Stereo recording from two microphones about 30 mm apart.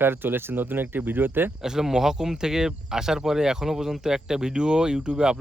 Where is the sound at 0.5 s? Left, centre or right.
Right.